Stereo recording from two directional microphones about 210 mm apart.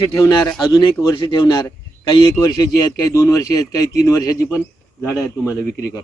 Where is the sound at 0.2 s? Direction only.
15° left (ahead or behind).